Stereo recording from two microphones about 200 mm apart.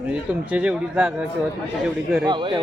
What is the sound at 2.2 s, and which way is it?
Speech, 20° right (ahead or behind).